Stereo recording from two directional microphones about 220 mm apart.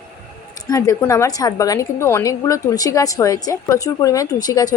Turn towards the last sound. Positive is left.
turn(degrees=15)  # may be behind; listen again after turning